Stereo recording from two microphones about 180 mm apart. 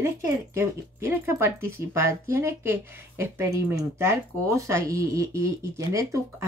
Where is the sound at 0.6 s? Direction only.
15° right (ahead or behind).